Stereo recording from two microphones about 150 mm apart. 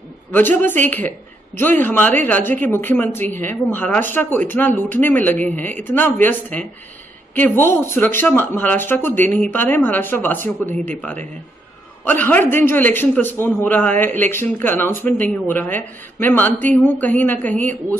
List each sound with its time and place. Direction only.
0.3 s speech: 15° left (ahead or behind)